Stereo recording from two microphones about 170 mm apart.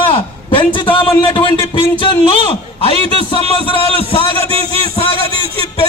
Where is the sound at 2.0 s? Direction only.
30° left (ahead or behind).